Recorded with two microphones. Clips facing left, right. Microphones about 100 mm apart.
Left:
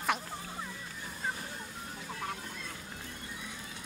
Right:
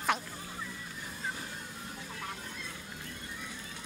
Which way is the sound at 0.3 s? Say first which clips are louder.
Left 2 dB; 30° left (ahead or behind).